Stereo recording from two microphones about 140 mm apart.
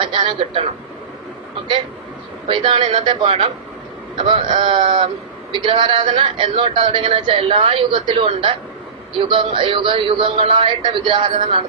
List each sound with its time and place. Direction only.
0.0 s a man's voice: 40° right (ahead or behind)
2.5 s a man's voice: 40° right (ahead or behind)